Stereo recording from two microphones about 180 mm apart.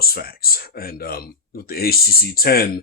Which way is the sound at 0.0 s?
55° left (ahead or behind).